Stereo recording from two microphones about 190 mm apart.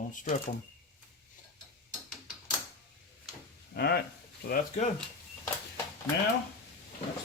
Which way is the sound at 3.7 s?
55° left (ahead or behind).